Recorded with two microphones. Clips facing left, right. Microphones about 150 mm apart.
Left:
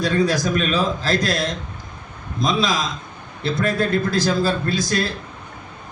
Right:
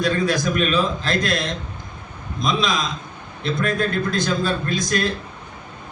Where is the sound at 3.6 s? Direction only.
35° left (ahead or behind).